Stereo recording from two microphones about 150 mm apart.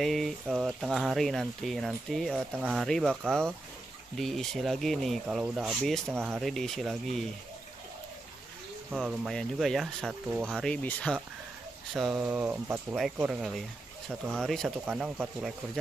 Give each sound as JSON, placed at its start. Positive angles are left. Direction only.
{"t": 0.0, "sound": "speech", "side_deg": 0}
{"t": 6.1, "sound": "speech", "side_deg": -15}
{"t": 6.4, "sound": "speech", "side_deg": 0}
{"t": 8.9, "sound": "speech", "side_deg": -5}
{"t": 12.2, "sound": "speech", "side_deg": -10}